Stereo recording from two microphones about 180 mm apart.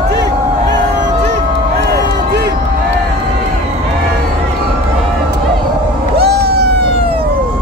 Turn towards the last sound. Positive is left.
turn(degrees=-60)  # may be behind; listen again after turning